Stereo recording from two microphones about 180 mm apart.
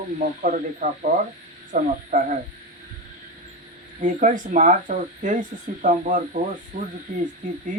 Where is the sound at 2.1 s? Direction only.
45° right (ahead or behind).